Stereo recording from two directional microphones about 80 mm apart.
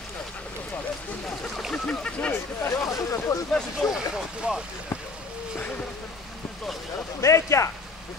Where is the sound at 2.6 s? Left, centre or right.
Left.